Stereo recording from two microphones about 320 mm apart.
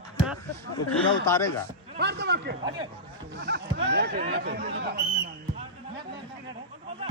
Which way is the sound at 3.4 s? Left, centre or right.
Right.